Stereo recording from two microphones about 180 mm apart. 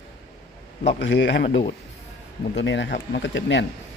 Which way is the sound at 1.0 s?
85° left.